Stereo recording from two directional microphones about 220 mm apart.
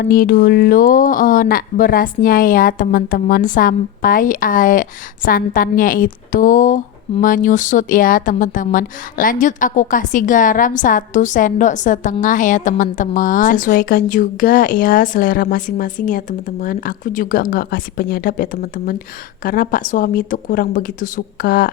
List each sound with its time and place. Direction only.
0.0 s speech: 40° left (ahead or behind)